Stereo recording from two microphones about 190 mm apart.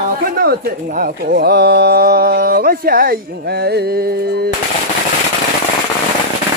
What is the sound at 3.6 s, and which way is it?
Music, 60° right (ahead or behind).